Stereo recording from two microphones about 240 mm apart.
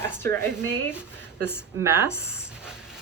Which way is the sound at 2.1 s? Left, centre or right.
Centre.